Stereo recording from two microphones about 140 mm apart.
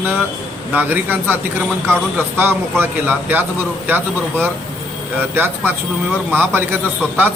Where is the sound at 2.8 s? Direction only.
15° right (ahead or behind).